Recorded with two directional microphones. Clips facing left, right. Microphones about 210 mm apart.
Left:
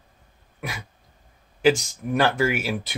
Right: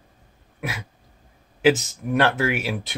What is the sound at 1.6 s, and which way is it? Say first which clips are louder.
Speech: right 1 dB; 5° right (ahead or behind).